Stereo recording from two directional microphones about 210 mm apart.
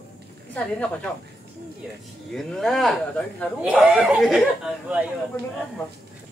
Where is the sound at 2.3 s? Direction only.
Centre (ahead or behind).